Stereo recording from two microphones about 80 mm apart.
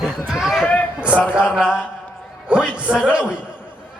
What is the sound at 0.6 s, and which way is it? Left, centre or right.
Speech, centre.